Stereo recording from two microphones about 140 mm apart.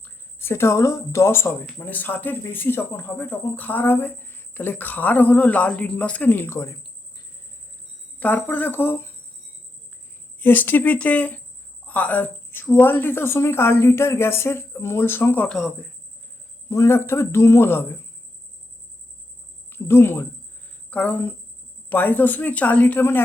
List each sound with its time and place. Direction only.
0.0 s speech: 15° left (ahead or behind)
8.2 s speech: 15° left (ahead or behind)
10.4 s speech: 15° left (ahead or behind)
16.6 s speech: 20° left (ahead or behind)
19.7 s speech: 15° left (ahead or behind)